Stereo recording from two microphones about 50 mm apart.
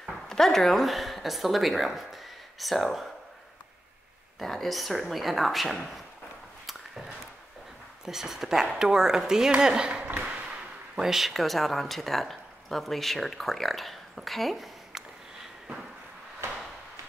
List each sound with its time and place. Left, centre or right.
0.3 s speech: centre
4.4 s speech: centre
6.6 s a sound: centre
8.0 s speech: centre
10.2 s a sound: right
11.0 s speech: centre